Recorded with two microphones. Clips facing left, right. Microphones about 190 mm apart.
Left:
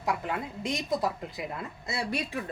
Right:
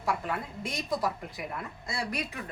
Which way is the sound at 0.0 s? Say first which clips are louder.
Left 1 dB; 20° left (ahead or behind).